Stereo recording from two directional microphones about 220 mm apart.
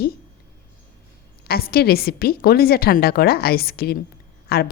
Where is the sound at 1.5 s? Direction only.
45° left (ahead or behind).